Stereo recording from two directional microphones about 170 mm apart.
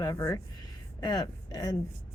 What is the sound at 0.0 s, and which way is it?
Speech, 20° left (ahead or behind).